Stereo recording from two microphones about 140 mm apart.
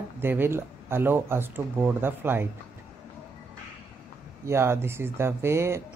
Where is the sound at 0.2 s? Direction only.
15° right (ahead or behind).